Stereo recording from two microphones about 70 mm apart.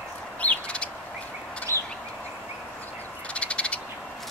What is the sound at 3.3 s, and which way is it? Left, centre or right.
Frog, centre.